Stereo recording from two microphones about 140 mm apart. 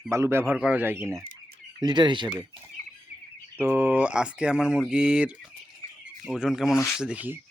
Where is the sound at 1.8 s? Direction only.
30° right (ahead or behind).